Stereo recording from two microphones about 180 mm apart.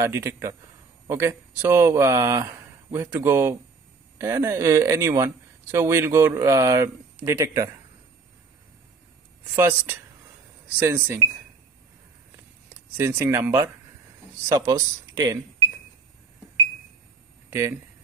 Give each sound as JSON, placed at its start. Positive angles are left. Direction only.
{"t": 0.0, "sound": "speech", "side_deg": -15}
{"t": 9.6, "sound": "speech", "side_deg": -15}
{"t": 12.9, "sound": "speech", "side_deg": -10}
{"t": 14.5, "sound": "speech", "side_deg": -20}
{"t": 17.5, "sound": "speech", "side_deg": -15}